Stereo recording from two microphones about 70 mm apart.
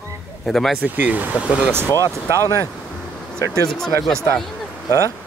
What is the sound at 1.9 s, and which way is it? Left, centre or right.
Speech, left.